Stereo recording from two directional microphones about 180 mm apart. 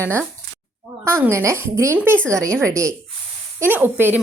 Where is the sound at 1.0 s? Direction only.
15° right (ahead or behind).